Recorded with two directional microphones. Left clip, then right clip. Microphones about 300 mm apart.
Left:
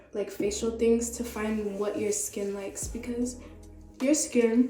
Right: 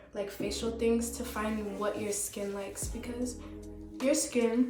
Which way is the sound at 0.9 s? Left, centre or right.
Centre.